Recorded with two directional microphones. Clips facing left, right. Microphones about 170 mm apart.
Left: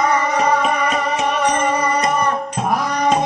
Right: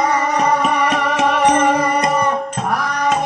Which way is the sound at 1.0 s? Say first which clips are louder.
Right 3 dB; 90° right.